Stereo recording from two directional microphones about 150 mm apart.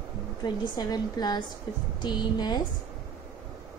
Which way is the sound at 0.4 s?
25° left (ahead or behind).